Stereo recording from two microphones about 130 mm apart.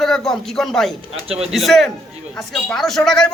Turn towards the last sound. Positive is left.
turn(degrees=5)  # may be behind; listen again after turning